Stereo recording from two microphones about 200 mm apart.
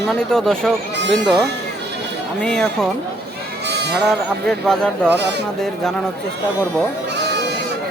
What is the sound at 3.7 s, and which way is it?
Sheep, 55° right (ahead or behind).